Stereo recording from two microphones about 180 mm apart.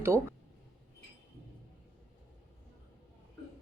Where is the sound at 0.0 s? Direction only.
15° right (ahead or behind).